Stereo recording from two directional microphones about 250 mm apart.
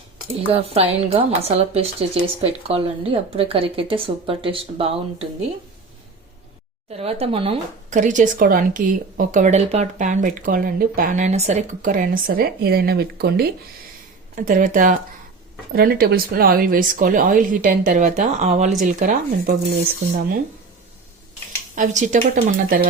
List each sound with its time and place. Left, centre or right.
0.5 s speech: right
6.9 s speech: right
21.8 s speech: right